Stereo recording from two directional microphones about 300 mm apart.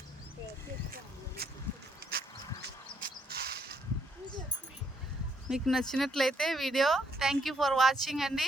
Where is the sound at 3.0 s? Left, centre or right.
Right.